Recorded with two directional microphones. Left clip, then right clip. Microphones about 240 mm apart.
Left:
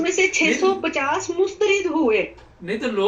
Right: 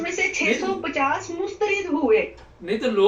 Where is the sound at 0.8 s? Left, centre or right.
Left.